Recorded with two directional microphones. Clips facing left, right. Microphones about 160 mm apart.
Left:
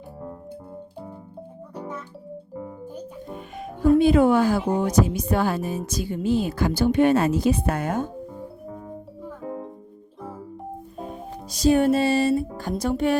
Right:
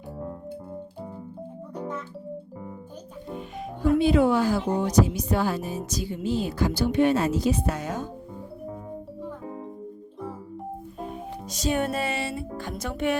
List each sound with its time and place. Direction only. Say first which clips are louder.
4.0 s speech: left 3 dB; 50° left (ahead or behind)
11.5 s music: left 8 dB; 35° left (ahead or behind)